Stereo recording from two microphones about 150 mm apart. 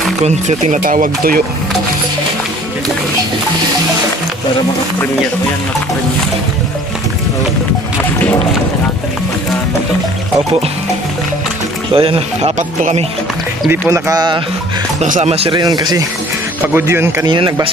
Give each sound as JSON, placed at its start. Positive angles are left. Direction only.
{"t": 0.2, "sound": "speech", "side_deg": -55}
{"t": 11.9, "sound": "speech", "side_deg": -40}
{"t": 13.7, "sound": "speech", "side_deg": -20}
{"t": 15.0, "sound": "speech", "side_deg": -50}
{"t": 15.5, "sound": "speech", "side_deg": -30}
{"t": 16.6, "sound": "speech", "side_deg": -15}